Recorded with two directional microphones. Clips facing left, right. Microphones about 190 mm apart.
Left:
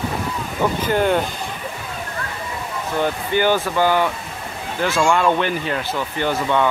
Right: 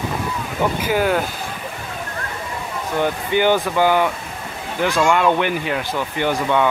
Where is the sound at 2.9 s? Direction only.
15° right (ahead or behind).